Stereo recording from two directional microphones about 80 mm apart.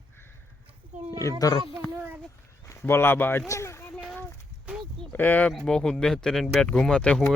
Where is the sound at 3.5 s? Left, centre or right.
Left.